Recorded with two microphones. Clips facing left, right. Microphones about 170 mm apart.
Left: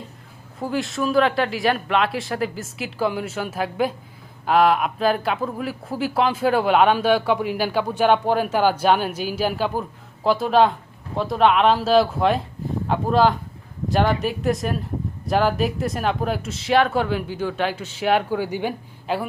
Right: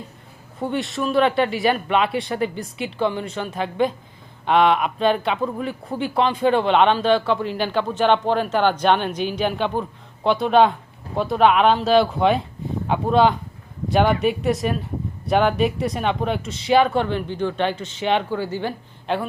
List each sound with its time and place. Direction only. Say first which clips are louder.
0.6 s speech: even; centre (ahead or behind)